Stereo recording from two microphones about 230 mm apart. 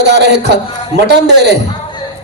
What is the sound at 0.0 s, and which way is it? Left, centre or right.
A man's voice, right.